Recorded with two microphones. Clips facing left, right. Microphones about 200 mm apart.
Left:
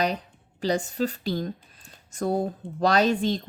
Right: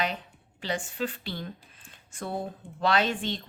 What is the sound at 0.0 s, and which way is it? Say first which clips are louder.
A woman's voice: left 5 dB; 40° left (ahead or behind).